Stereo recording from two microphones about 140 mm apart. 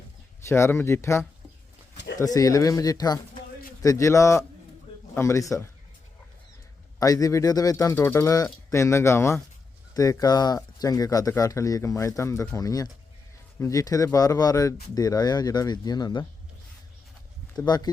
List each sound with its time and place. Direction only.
0.4 s speech: 20° left (ahead or behind)
7.0 s speech: 25° left (ahead or behind)
17.7 s speech: 30° left (ahead or behind)